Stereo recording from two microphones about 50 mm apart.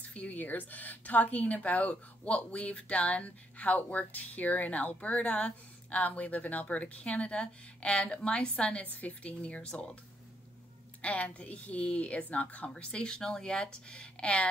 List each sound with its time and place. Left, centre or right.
0.0 s a sound: left
0.4 s speech: left
11.0 s speech: left